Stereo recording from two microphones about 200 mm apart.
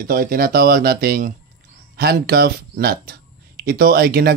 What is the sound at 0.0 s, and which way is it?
Speech, 45° right (ahead or behind).